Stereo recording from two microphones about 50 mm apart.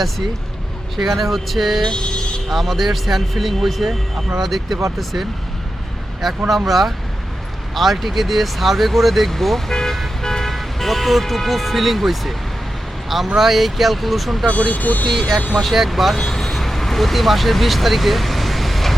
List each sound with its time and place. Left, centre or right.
0.9 s speech: centre
1.8 s vehicle: centre
2.5 s speech: centre
6.2 s speech: centre
14.4 s speech: left
15.0 s speech: centre